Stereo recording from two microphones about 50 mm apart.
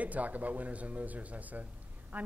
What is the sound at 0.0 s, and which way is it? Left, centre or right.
A woman's voice, right.